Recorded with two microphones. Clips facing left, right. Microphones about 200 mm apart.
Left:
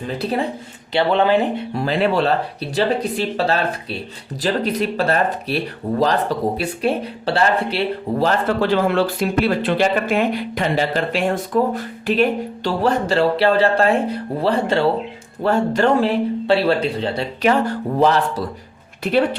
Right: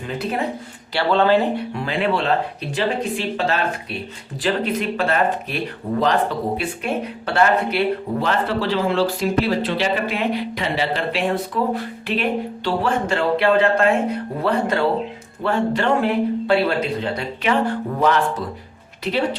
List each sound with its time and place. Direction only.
0.2 s speech: 35° left (ahead or behind)
0.9 s speech: 15° left (ahead or behind)
1.7 s speech: 40° left (ahead or behind)
15.4 s speech: 40° left (ahead or behind)
16.0 s speech: 30° left (ahead or behind)